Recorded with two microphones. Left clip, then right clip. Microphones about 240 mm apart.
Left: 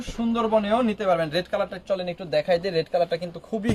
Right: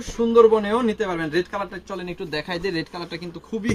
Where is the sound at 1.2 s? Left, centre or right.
Left.